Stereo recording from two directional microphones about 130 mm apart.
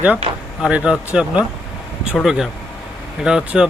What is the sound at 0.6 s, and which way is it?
Speech, 5° right (ahead or behind).